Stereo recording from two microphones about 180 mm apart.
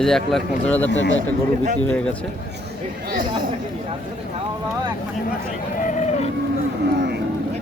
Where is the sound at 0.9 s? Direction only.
90° left.